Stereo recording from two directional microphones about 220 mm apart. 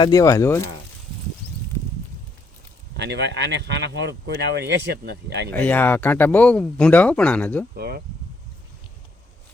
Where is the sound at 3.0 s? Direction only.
50° right (ahead or behind).